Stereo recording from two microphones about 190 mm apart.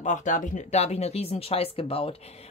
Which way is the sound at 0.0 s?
40° left (ahead or behind).